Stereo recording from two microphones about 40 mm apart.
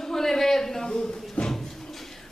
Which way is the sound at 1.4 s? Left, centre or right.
Left.